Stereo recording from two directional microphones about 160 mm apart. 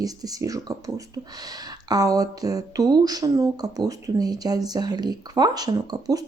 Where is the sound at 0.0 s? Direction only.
25° right (ahead or behind).